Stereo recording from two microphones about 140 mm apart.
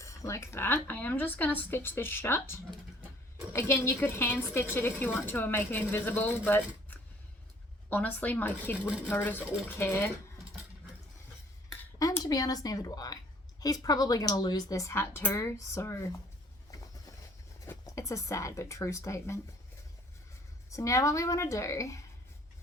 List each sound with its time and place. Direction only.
0.0 s a woman's voice: 20° left (ahead or behind)
11.7 s speech: 25° left (ahead or behind)
16.7 s a sound: 25° left (ahead or behind)
17.6 s speech: 25° left (ahead or behind)
20.7 s speech: 25° left (ahead or behind)